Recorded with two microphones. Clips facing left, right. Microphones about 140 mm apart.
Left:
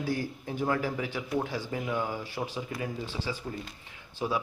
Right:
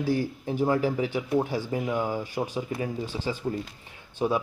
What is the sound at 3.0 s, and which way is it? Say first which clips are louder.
Speech: right 4 dB; 15° right (ahead or behind).